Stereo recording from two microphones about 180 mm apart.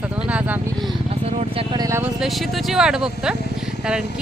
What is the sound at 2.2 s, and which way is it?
Speech, centre (ahead or behind).